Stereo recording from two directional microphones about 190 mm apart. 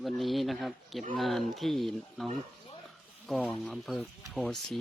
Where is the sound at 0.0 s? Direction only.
Centre (ahead or behind).